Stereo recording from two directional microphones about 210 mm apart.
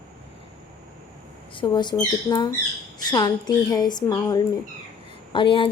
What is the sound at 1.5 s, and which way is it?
A woman's voice, 20° left (ahead or behind).